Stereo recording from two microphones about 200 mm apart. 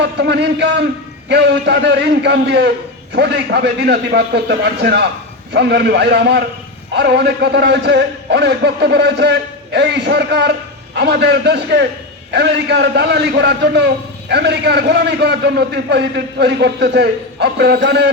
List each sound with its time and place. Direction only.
0.0 s a man's voice: 60° right (ahead or behind)